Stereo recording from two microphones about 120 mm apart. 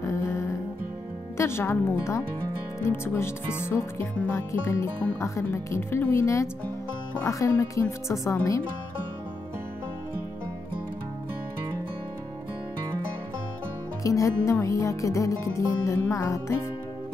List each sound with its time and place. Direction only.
0.0 s music: 25° left (ahead or behind)
1.4 s speech: 20° left (ahead or behind)
14.0 s speech: 25° left (ahead or behind)